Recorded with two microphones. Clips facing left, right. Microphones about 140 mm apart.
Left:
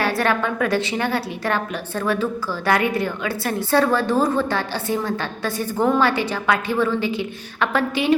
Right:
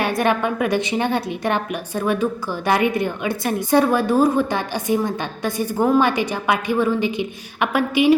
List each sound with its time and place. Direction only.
0.0 s a woman's voice: 15° right (ahead or behind)